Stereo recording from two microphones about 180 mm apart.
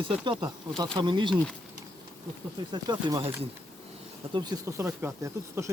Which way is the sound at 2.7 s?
25° right (ahead or behind).